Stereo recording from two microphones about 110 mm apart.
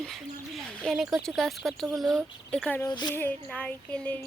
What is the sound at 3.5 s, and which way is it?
Speech, 10° left (ahead or behind).